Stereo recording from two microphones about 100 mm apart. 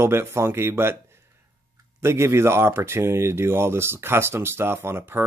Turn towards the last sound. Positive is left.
turn(degrees=-25)  # may be behind; listen again after turning